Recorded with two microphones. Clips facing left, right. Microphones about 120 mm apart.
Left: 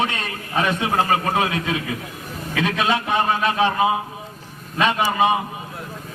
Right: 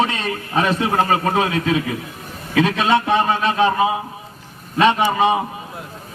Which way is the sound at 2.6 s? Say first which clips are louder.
Right 4 dB; 30° right (ahead or behind).